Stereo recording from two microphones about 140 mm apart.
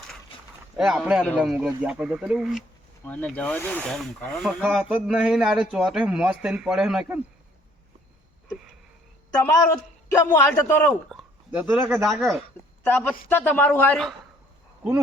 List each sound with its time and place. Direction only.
0.8 s a man's voice: 5° right (ahead or behind)
1.2 s speech: 10° left (ahead or behind)
1.5 s a man's voice: 5° right (ahead or behind)
3.1 s a man's voice: 10° left (ahead or behind)
9.4 s a man's voice: 20° left (ahead or behind)
11.1 s speech: 10° right (ahead or behind)
12.2 s a man's voice: centre (ahead or behind)
12.8 s a man's voice: 15° left (ahead or behind)